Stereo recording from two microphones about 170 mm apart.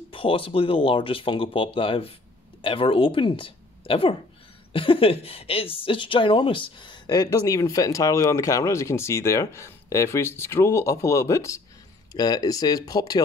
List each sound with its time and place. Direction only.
0.1 s a woman's voice: 30° left (ahead or behind)